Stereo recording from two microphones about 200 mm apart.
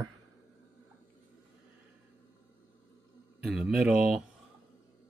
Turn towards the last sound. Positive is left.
turn(degrees=-5)  # may be behind; listen again after turning